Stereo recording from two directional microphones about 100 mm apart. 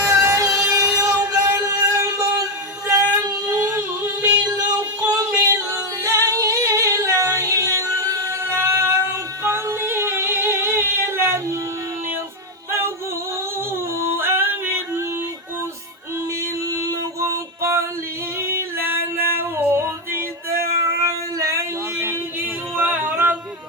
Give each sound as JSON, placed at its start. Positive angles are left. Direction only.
{"t": 0.0, "sound": "music", "side_deg": -30}
{"t": 5.4, "sound": "singing", "side_deg": -25}
{"t": 14.2, "sound": "music", "side_deg": -20}
{"t": 16.6, "sound": "a sound", "side_deg": -30}
{"t": 18.3, "sound": "singing", "side_deg": -25}
{"t": 21.0, "sound": "a sound", "side_deg": -35}
{"t": 22.8, "sound": "music", "side_deg": -20}